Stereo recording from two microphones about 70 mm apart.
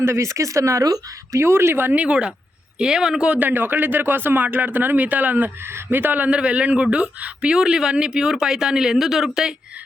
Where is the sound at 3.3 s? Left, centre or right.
Right; by 9.5 s centre.